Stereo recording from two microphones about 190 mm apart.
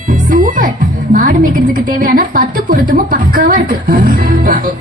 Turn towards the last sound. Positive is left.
turn(degrees=-50)  # may be behind; listen again after turning